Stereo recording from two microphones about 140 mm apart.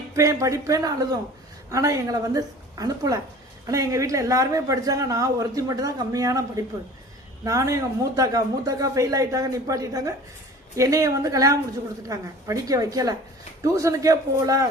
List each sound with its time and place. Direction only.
0.2 s speech: 20° right (ahead or behind)